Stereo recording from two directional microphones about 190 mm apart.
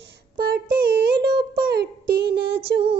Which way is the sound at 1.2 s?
25° right (ahead or behind).